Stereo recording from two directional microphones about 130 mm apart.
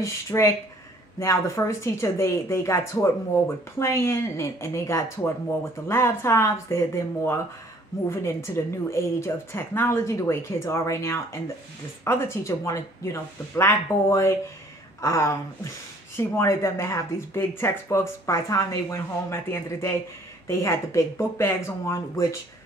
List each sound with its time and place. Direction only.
0.0 s speech: 20° left (ahead or behind)